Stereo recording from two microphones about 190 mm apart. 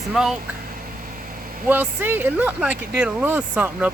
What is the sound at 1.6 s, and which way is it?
Speech, 10° right (ahead or behind).